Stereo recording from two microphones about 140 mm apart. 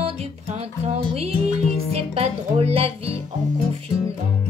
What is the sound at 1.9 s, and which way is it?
Music, 45° right (ahead or behind).